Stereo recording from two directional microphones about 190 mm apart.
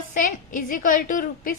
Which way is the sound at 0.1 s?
45° left (ahead or behind).